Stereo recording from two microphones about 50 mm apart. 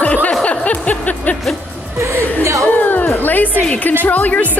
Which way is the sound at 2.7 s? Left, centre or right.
Left.